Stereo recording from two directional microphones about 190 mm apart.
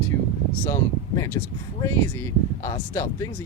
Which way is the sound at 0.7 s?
15° left (ahead or behind).